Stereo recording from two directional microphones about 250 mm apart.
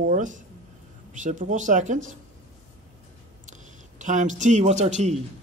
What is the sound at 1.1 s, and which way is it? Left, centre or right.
Speech, right.